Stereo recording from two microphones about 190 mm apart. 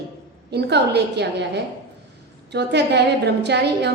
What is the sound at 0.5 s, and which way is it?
Speech, 60° right (ahead or behind).